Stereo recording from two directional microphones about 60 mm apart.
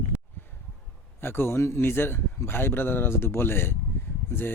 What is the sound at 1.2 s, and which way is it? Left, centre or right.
A man's voice, left.